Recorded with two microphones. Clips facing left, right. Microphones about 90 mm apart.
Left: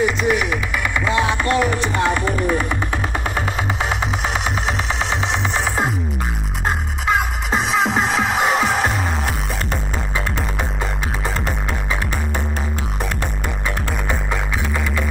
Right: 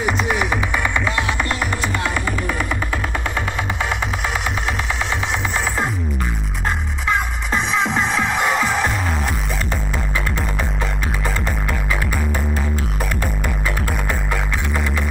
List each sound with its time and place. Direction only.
0.0 s music: 25° right (ahead or behind)
1.1 s music: 20° left (ahead or behind)
7.8 s music: centre (ahead or behind)